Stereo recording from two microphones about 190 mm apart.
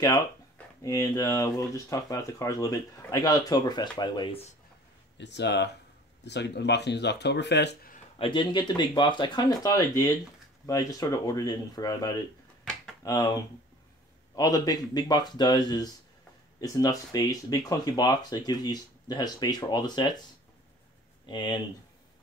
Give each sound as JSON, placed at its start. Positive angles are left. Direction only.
{"t": 0.8, "sound": "speech", "side_deg": 20}
{"t": 5.1, "sound": "speech", "side_deg": 65}
{"t": 8.2, "sound": "speech", "side_deg": 25}
{"t": 14.3, "sound": "speech", "side_deg": 20}
{"t": 21.3, "sound": "speech", "side_deg": 25}